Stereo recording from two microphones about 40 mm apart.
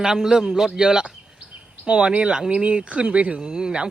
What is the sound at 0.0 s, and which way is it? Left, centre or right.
A man's voice, centre.